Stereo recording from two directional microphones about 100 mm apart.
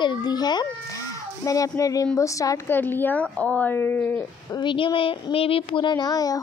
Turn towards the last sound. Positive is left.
turn(degrees=40)  # may be behind; listen again after turning